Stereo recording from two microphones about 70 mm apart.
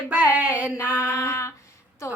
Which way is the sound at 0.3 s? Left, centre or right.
Right.